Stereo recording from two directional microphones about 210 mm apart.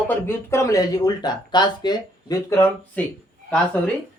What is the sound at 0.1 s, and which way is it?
Speech, 10° left (ahead or behind).